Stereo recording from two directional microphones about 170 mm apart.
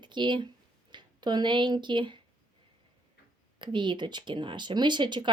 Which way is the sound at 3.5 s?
30° right (ahead or behind).